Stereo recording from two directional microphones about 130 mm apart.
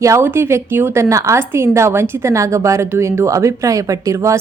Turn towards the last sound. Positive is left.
turn(degrees=-25)  # may be behind; listen again after turning